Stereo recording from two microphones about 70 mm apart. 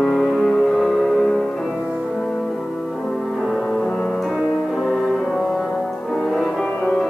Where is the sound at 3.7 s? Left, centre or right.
Centre.